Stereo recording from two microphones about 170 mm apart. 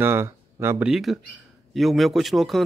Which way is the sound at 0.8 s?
Centre (ahead or behind).